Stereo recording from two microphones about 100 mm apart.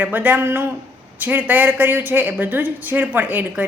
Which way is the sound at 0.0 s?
20° right (ahead or behind).